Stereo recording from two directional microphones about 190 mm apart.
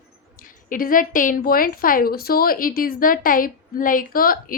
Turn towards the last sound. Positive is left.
turn(degrees=50)  # may be behind; listen again after turning